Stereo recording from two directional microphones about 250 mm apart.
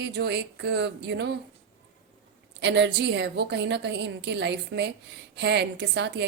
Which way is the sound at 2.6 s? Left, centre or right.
Right.